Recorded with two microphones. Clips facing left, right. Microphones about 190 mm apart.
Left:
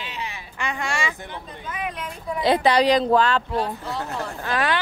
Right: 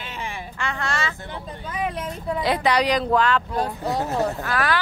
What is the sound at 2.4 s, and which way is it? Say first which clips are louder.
Speech: left 4 dB; 25° left (ahead or behind).